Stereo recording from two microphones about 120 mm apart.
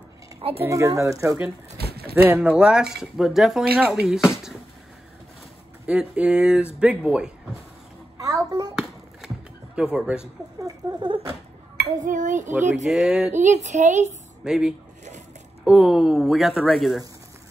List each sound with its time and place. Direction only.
0.4 s speech: 55° right (ahead or behind)
0.7 s speech: 25° right (ahead or behind)
2.2 s speech: 10° right (ahead or behind)
5.9 s speech: 10° right (ahead or behind)
8.2 s a sound: 30° right (ahead or behind)
8.7 s a sound: 5° right (ahead or behind)
9.9 s speech: 5° right (ahead or behind)
10.6 s a sound: 40° right (ahead or behind)
12.0 s a sound: 90° right
12.8 s speech: 5° right (ahead or behind)
13.3 s a woman's voice: 90° right
14.4 s speech: 5° right (ahead or behind)